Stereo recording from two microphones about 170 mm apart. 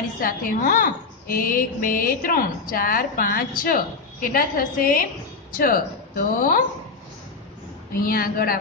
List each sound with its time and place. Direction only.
0.2 s a woman's voice: 55° left (ahead or behind)
8.0 s a woman's voice: 60° left (ahead or behind)